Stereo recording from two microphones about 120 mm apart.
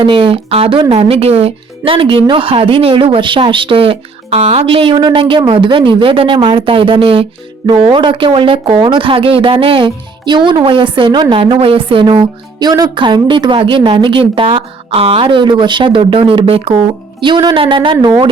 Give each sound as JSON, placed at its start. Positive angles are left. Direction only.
{"t": 0.0, "sound": "speech", "side_deg": -45}